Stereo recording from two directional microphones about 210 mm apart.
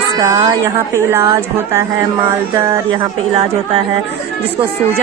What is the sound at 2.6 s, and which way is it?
Speech, 25° right (ahead or behind).